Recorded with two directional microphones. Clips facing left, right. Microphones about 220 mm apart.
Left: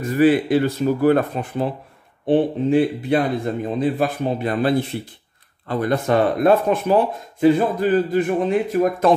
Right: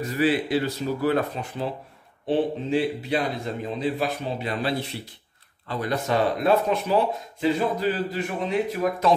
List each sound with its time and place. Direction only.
0.0 s speech: 50° left (ahead or behind)